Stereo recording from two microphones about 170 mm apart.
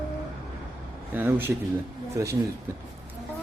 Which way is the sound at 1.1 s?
10° right (ahead or behind).